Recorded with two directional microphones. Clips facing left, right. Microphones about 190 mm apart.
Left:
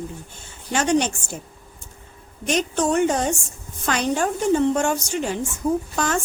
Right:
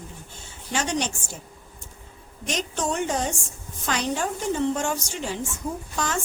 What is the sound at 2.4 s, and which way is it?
A woman's voice, 55° left (ahead or behind).